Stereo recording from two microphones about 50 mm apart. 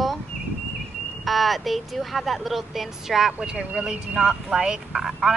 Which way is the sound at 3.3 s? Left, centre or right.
Centre.